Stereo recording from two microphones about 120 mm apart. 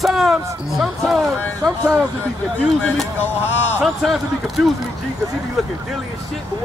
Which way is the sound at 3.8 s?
Centre (ahead or behind).